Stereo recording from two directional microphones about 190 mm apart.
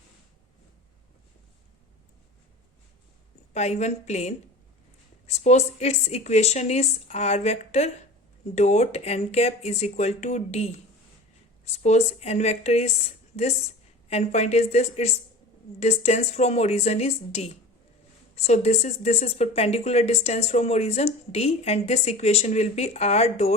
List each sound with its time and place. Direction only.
3.5 s speech: 35° left (ahead or behind)